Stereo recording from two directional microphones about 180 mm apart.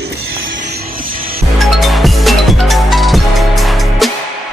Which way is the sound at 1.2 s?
55° right (ahead or behind).